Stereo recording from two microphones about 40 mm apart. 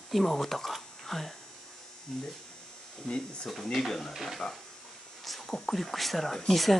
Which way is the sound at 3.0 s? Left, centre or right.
Left.